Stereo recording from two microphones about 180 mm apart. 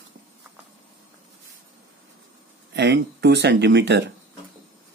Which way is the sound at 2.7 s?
70° right (ahead or behind).